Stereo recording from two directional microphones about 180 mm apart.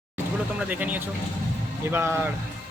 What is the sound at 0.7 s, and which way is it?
Speech, 10° right (ahead or behind).